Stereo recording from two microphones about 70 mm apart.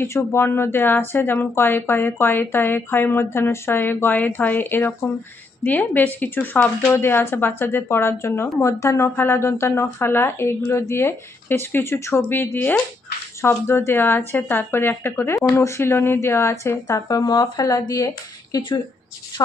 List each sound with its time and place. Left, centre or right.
0.0 s speech: left
8.5 s speech: left
17.2 s speech: left